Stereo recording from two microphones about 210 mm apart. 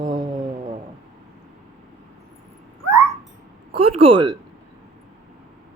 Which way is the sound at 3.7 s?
30° right (ahead or behind).